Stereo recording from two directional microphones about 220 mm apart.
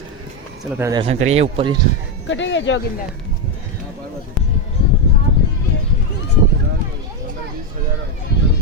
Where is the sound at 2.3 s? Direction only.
55° left (ahead or behind).